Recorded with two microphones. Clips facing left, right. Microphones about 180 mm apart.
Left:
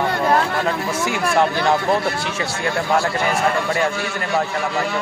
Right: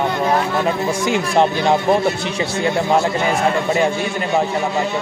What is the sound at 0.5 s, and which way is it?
Speech, 20° right (ahead or behind).